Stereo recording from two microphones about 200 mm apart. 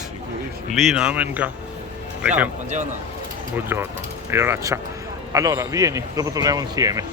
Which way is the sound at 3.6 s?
10° right (ahead or behind).